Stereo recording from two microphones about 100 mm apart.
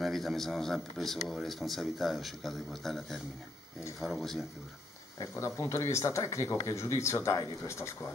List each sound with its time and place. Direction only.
0.0 s speech: centre (ahead or behind)
5.4 s speech: 25° left (ahead or behind)